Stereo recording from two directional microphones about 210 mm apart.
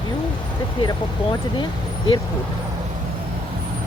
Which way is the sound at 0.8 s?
20° left (ahead or behind).